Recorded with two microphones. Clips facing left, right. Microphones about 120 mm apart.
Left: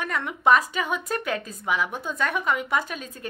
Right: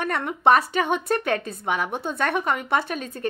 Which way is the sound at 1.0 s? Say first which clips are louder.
Right 5 dB; 55° right (ahead or behind).